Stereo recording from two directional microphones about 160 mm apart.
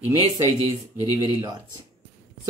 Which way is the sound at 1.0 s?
25° right (ahead or behind).